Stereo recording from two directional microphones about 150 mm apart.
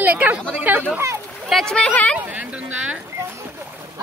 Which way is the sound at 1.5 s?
5° left (ahead or behind).